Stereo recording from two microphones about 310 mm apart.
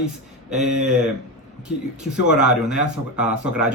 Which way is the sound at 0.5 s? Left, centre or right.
Right.